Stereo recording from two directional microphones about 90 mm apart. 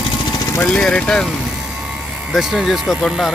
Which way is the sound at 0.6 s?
15° left (ahead or behind).